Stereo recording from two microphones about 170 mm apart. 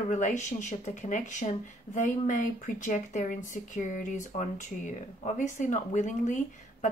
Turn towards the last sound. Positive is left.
turn(degrees=45)  # may be behind; listen again after turning